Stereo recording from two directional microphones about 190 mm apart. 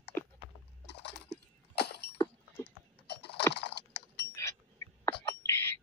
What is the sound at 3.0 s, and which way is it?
Typing, 60° left (ahead or behind).